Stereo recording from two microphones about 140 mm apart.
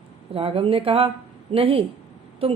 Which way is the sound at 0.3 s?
40° right (ahead or behind).